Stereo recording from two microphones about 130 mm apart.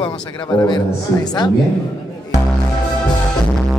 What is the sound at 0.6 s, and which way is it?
Speech, 35° left (ahead or behind).